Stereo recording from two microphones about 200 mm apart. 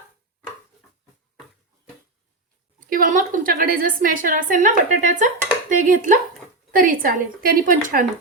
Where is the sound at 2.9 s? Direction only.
45° right (ahead or behind).